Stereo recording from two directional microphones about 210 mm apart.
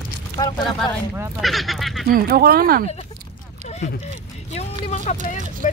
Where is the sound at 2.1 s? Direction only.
45° right (ahead or behind).